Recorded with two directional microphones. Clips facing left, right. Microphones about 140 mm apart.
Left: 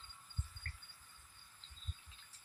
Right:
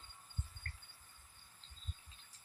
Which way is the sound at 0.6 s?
40° right (ahead or behind).